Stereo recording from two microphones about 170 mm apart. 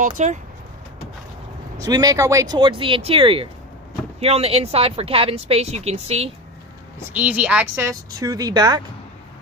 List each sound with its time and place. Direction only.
0.0 s speech: 45° right (ahead or behind)
1.8 s speech: 20° right (ahead or behind); by 6.3 s 35° right (ahead or behind)
7.1 s a woman's voice: 5° right (ahead or behind)
8.2 s speech: 20° right (ahead or behind)